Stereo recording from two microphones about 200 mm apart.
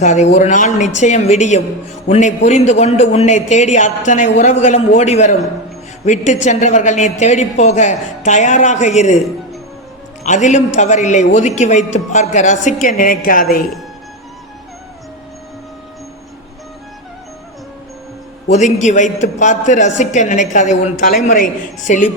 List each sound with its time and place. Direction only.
0.0 s a man's voice: 35° left (ahead or behind)
10.2 s a man's voice: 35° left (ahead or behind)
18.4 s a man's voice: 35° left (ahead or behind)